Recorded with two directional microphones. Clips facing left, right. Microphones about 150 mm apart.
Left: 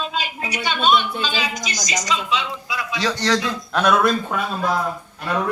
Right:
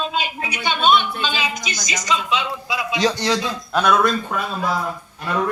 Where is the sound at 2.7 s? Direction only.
20° right (ahead or behind).